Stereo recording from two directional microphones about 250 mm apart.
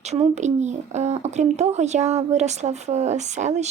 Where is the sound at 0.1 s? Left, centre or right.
Right.